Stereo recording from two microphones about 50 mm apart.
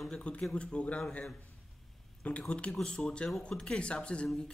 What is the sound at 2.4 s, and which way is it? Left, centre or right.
Speech, left.